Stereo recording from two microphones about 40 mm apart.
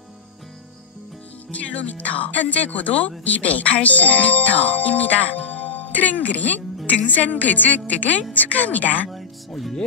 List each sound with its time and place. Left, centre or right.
1.5 s speech: left
9.1 s music: centre